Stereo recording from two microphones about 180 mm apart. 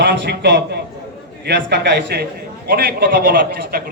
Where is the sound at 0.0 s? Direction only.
70° right (ahead or behind).